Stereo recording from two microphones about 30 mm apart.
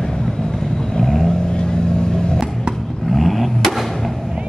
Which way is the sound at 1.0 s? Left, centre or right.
Centre.